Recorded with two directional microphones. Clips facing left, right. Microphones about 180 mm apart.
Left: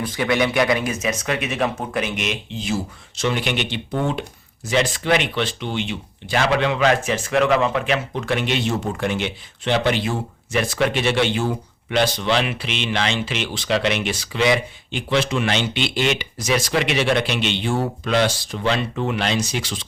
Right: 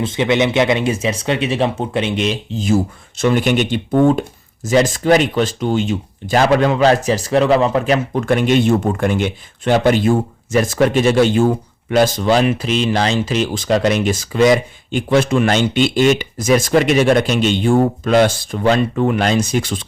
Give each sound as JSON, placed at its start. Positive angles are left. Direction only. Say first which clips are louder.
{"t": 0.0, "sound": "speech", "louder": "right 5 dB", "side_deg": -25}